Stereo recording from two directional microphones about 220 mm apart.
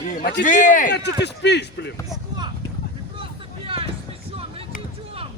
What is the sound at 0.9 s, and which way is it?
Speech, 50° left (ahead or behind).